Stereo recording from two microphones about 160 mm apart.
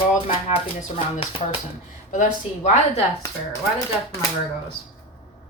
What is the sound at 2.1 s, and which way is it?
Speech, 50° left (ahead or behind).